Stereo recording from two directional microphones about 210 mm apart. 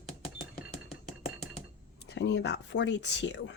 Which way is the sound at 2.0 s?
55° left (ahead or behind).